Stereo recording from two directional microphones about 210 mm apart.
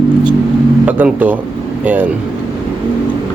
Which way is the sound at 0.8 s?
5° right (ahead or behind).